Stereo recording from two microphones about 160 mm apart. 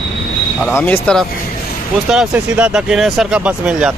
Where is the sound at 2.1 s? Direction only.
5° right (ahead or behind).